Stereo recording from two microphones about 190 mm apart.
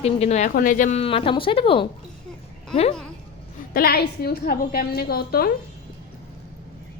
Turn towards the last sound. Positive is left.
turn(degrees=55)  # may be behind; listen again after turning